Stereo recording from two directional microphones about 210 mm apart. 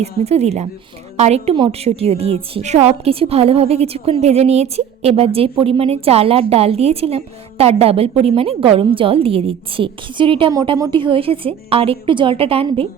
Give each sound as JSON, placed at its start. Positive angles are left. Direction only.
{"t": 0.0, "sound": "a woman's voice", "side_deg": -30}